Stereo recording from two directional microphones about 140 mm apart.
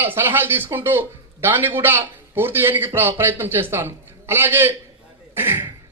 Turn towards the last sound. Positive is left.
turn(degrees=-15)  # may be behind; listen again after turning